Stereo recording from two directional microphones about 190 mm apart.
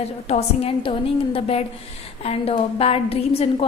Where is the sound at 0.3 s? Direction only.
30° left (ahead or behind).